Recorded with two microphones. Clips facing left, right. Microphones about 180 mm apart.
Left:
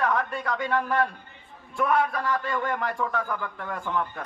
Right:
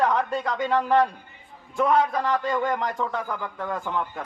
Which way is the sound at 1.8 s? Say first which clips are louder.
Right 3 dB; 20° right (ahead or behind).